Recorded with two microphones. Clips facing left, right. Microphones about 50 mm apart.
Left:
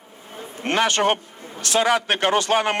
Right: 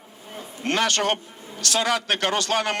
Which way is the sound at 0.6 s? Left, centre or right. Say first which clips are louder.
Left 3 dB; left.